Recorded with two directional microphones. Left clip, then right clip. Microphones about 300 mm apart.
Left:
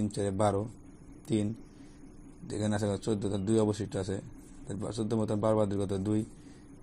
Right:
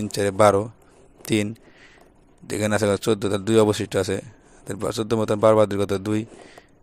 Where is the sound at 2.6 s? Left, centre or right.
Right.